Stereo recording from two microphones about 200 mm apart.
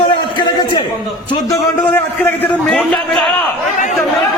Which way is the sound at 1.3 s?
15° left (ahead or behind).